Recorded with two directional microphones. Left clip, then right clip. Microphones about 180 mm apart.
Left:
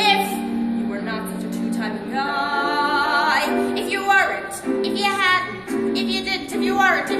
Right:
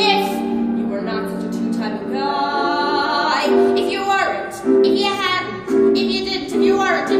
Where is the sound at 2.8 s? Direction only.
10° right (ahead or behind).